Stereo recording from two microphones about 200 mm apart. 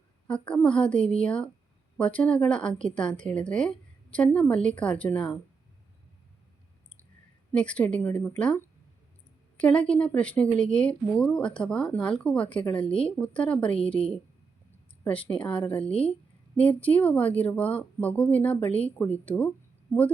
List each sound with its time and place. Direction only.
0.3 s speech: 5° left (ahead or behind)
7.5 s a woman's voice: 5° left (ahead or behind)
12.9 s speech: 25° left (ahead or behind)
13.2 s a woman's voice: 5° left (ahead or behind)
15.0 s a woman's voice: 5° left (ahead or behind)